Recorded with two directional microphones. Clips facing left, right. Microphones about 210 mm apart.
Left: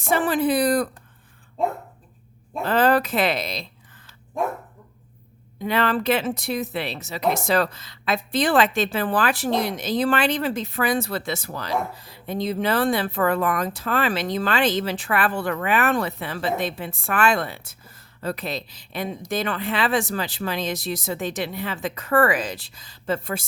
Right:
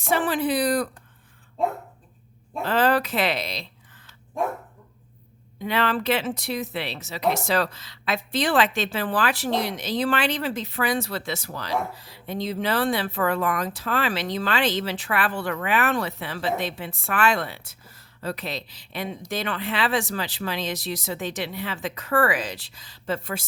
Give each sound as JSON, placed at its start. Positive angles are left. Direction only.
{"t": 0.0, "sound": "speech", "side_deg": 45}
{"t": 2.6, "sound": "speech", "side_deg": 50}
{"t": 5.5, "sound": "speech", "side_deg": 45}